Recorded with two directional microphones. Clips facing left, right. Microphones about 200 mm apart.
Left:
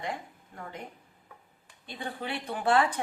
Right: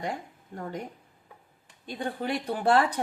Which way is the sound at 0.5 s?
40° right (ahead or behind).